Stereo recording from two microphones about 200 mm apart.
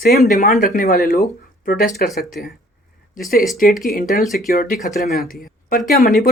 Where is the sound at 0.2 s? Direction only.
35° left (ahead or behind).